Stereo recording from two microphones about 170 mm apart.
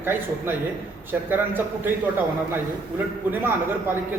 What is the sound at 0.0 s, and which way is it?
A man's voice, 10° right (ahead or behind).